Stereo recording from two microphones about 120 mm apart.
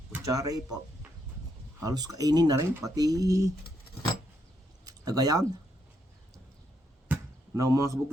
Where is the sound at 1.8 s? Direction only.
30° right (ahead or behind).